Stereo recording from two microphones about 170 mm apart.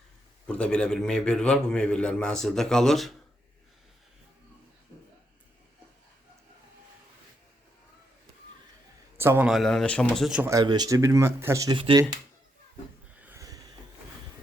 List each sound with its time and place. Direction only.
0.4 s a man's voice: 5° left (ahead or behind)
9.1 s a man's voice: 15° right (ahead or behind)
9.5 s a man's voice: centre (ahead or behind)
10.4 s speech: 20° right (ahead or behind)
11.8 s speech: 30° right (ahead or behind)
13.1 s a sound: 10° right (ahead or behind)